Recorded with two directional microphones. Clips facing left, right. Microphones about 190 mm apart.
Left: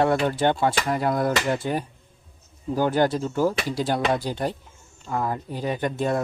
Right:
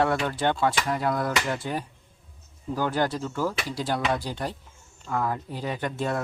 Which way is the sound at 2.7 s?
20° left (ahead or behind).